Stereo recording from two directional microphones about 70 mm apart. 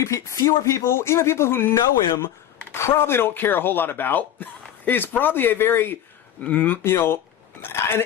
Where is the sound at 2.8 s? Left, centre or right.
Left.